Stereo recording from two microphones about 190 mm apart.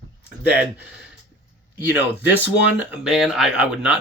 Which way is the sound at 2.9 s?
5° right (ahead or behind).